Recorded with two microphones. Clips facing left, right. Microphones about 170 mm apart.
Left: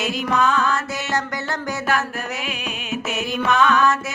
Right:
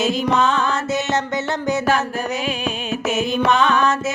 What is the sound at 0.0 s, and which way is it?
Music, 25° right (ahead or behind).